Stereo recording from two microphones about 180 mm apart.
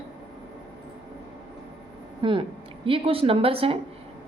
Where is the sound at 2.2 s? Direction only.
30° right (ahead or behind).